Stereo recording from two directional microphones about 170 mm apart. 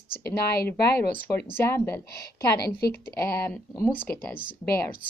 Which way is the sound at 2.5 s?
70° left (ahead or behind).